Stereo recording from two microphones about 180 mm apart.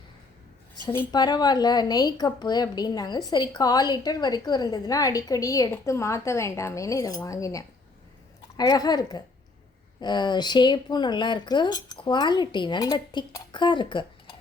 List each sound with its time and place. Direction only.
0.9 s speech: 25° left (ahead or behind)